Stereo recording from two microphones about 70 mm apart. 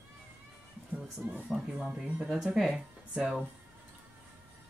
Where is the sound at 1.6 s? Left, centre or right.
Centre.